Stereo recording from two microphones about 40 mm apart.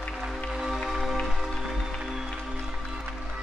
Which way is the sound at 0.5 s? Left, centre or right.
Centre.